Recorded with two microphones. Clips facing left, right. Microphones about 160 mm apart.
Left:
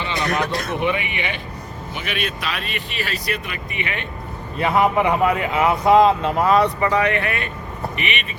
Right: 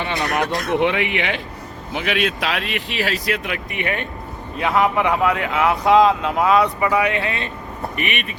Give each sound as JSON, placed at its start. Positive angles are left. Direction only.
{"t": 0.0, "sound": "a sound", "side_deg": -65}
{"t": 0.7, "sound": "speech", "side_deg": -90}
{"t": 4.5, "sound": "speech", "side_deg": 0}
{"t": 6.7, "sound": "speech", "side_deg": -10}
{"t": 7.9, "sound": "speech", "side_deg": -45}